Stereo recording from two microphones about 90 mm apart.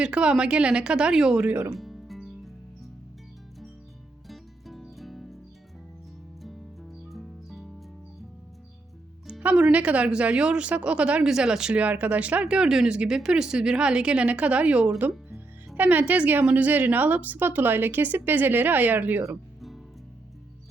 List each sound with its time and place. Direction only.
0.0 s a woman's voice: 10° right (ahead or behind)
1.7 s music: centre (ahead or behind)
4.3 s music: centre (ahead or behind)
6.4 s music: centre (ahead or behind)
9.4 s a woman's voice: 15° right (ahead or behind)